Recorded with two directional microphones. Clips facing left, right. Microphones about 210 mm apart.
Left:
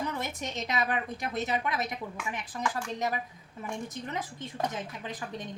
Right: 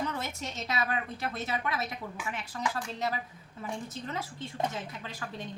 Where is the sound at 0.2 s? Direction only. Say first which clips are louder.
Left 2 dB; 15° left (ahead or behind).